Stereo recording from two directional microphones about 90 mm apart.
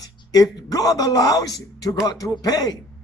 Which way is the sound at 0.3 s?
45° left (ahead or behind).